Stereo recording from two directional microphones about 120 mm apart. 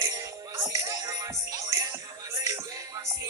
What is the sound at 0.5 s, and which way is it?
Music, 25° right (ahead or behind).